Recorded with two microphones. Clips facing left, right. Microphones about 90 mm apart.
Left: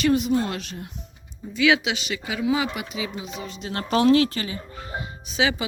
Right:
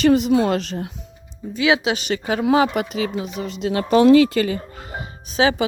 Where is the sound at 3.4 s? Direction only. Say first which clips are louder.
Right 9 dB; 80° right.